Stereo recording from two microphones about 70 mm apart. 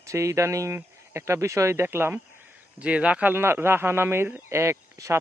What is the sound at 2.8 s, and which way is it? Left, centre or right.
Speech, centre.